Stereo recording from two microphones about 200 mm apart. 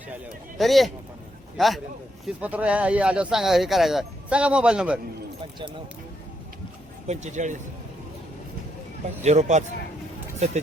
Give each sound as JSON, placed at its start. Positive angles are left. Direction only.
{"t": 0.6, "sound": "speech", "side_deg": 0}
{"t": 7.1, "sound": "speech", "side_deg": -35}
{"t": 9.2, "sound": "speech", "side_deg": -35}